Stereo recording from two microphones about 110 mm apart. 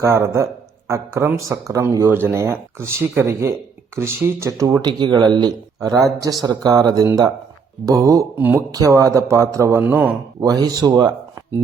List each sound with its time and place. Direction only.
0.0 s speech: 25° right (ahead or behind)
8.4 s speech: 20° right (ahead or behind)
8.7 s speech: 30° right (ahead or behind)
9.8 s speech: 15° right (ahead or behind)
10.4 s speech: 35° right (ahead or behind)